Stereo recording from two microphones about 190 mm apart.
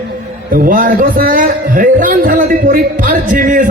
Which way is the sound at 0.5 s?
45° right (ahead or behind).